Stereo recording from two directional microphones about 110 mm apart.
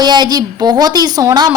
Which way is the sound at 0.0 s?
40° right (ahead or behind).